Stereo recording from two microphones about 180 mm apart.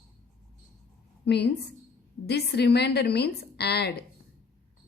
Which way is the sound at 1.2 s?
65° left (ahead or behind).